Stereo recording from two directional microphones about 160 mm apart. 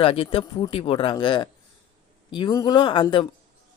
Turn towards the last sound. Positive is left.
turn(degrees=30)  # may be behind; listen again after turning